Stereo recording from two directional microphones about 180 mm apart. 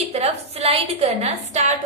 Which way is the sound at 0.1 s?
35° right (ahead or behind).